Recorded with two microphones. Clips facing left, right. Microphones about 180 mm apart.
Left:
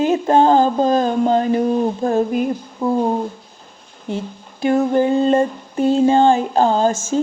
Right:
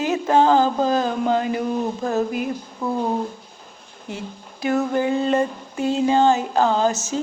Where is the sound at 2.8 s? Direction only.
20° left (ahead or behind).